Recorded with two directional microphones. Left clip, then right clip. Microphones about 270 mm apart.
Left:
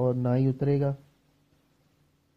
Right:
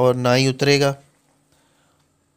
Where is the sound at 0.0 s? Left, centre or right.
Centre.